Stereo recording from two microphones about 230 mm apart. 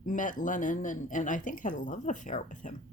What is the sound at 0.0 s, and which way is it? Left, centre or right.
Speech, left.